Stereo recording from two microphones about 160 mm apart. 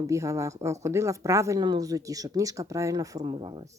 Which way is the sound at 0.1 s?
20° right (ahead or behind).